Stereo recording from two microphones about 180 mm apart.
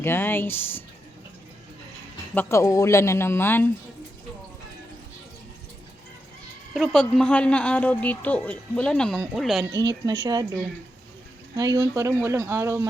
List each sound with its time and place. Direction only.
0.0 s speech: 10° left (ahead or behind)
2.3 s speech: 15° left (ahead or behind)
6.7 s speech: centre (ahead or behind)
9.6 s a woman's voice: 20° right (ahead or behind)